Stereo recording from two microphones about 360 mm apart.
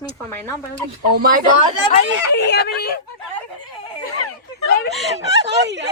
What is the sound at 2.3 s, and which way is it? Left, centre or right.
Speech, left.